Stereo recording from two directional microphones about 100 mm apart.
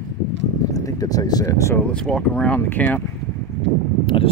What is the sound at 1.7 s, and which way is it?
Speech, 10° left (ahead or behind).